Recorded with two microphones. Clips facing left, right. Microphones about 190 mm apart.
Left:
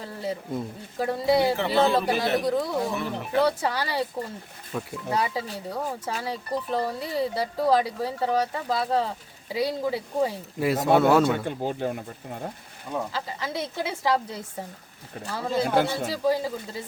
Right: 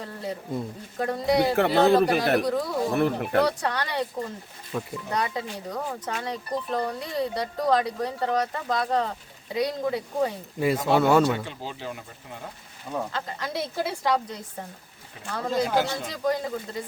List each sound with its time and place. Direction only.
0.0 s speech: centre (ahead or behind)
1.5 s speech: 60° right (ahead or behind)
1.9 s speech: centre (ahead or behind)
2.9 s speech: 60° right (ahead or behind)
3.4 s speech: 5° left (ahead or behind)
11.4 s speech: 50° left (ahead or behind)
13.1 s speech: 5° left (ahead or behind)
15.3 s speech: 5° left (ahead or behind)